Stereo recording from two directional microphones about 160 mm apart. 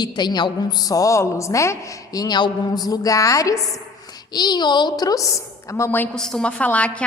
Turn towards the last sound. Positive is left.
turn(degrees=10)  # may be behind; listen again after turning